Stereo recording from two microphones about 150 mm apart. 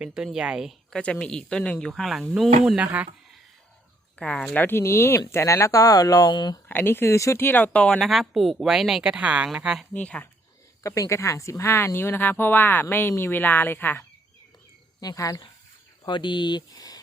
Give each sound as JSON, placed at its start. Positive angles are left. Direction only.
{"t": 0.0, "sound": "speech", "side_deg": -5}
{"t": 1.0, "sound": "speech", "side_deg": 10}
{"t": 4.2, "sound": "speech", "side_deg": 5}
{"t": 6.7, "sound": "speech", "side_deg": 15}
{"t": 9.9, "sound": "speech", "side_deg": 10}
{"t": 10.8, "sound": "speech", "side_deg": 20}
{"t": 15.0, "sound": "speech", "side_deg": 20}